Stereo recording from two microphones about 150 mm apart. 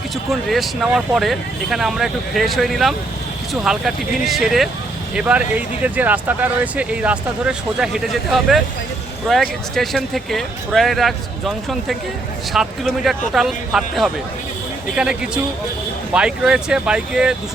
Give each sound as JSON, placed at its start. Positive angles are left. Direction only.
{"t": 0.3, "sound": "speech", "side_deg": 0}